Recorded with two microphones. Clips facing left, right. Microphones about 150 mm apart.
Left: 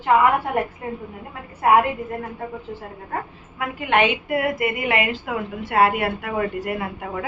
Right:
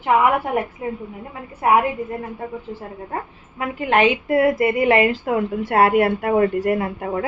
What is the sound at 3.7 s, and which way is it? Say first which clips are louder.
A woman's voice: right 3 dB; 35° right (ahead or behind).